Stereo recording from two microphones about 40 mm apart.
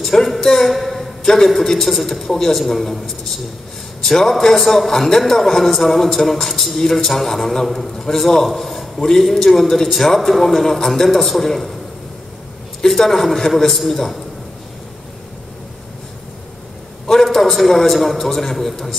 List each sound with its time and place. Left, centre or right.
0.0 s a sound: centre
1.2 s a man's voice: centre
4.0 s a man's voice: centre
12.8 s a man's voice: centre
17.1 s a man's voice: centre